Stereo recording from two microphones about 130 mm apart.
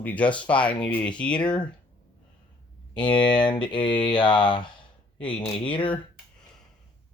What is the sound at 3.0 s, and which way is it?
Speech, 35° left (ahead or behind).